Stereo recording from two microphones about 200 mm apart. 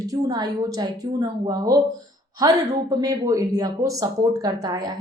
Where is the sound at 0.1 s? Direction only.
20° right (ahead or behind).